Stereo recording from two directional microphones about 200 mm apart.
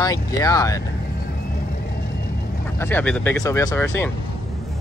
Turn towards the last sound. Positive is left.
turn(degrees=10)  # may be behind; listen again after turning